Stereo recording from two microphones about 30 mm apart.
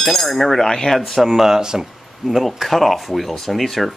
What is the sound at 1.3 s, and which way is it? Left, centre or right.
Speech, centre.